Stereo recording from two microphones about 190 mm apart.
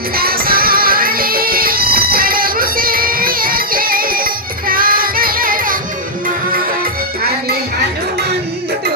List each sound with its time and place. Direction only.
0.2 s music: 50° right (ahead or behind)